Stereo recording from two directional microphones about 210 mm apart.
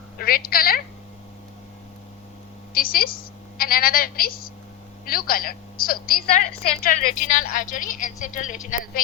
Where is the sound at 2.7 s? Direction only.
45° left (ahead or behind).